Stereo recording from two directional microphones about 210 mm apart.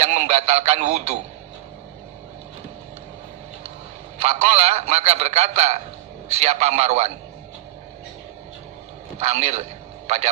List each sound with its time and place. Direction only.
0.0 s speech: 30° right (ahead or behind)
4.2 s a man's voice: 30° right (ahead or behind)
9.1 s a man's voice: 30° right (ahead or behind)